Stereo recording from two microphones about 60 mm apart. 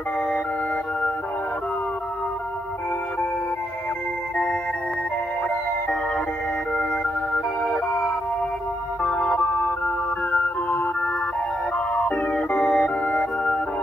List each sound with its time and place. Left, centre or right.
7.3 s music: centre
9.0 s music: centre